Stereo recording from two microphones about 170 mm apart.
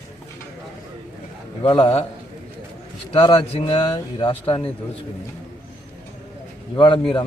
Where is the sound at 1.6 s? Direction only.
30° left (ahead or behind).